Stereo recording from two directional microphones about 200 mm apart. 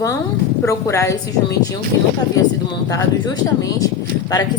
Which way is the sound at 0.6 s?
15° left (ahead or behind).